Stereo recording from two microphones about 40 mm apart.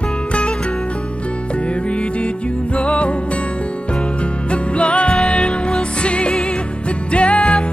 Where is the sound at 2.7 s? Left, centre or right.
Left.